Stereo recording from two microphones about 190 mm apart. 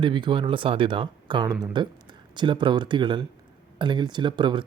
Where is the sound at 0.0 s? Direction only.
25° right (ahead or behind).